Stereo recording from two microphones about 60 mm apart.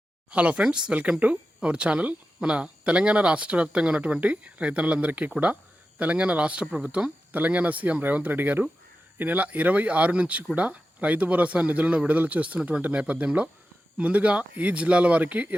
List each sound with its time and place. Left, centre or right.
0.3 s speech: right